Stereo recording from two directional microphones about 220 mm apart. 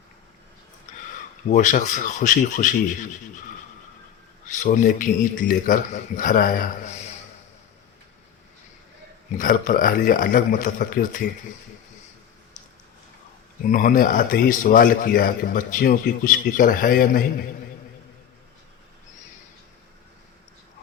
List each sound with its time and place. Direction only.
0.9 s a sound: 35° left (ahead or behind)
1.5 s a man's voice: 35° left (ahead or behind)
4.4 s a man's voice: 35° left (ahead or behind)
9.4 s a man's voice: 40° left (ahead or behind)
13.7 s a man's voice: 40° left (ahead or behind)